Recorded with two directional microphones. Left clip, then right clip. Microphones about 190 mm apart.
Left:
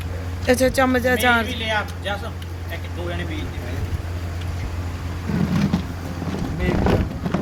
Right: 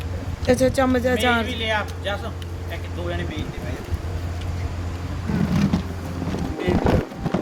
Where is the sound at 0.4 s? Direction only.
5° right (ahead or behind).